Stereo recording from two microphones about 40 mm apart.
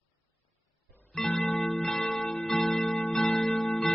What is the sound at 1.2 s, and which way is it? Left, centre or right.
Music, centre.